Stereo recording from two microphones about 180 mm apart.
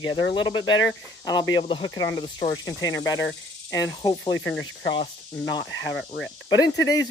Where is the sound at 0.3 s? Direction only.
25° left (ahead or behind).